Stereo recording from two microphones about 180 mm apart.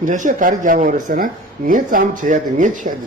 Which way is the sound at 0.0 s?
45° right (ahead or behind).